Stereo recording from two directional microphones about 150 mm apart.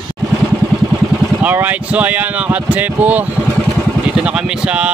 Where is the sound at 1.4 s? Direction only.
10° right (ahead or behind).